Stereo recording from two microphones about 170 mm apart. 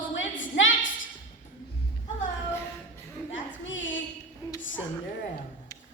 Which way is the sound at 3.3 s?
90° left.